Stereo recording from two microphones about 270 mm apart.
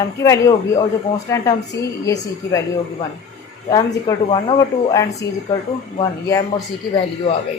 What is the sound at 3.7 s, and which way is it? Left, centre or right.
Speech, centre.